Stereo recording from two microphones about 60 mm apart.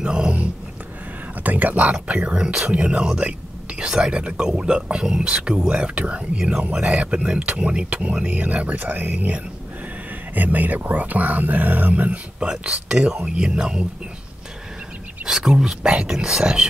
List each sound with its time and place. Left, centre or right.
0.0 s speech: centre
1.4 s speech: right; by 13.8 s centre
15.2 s speech: centre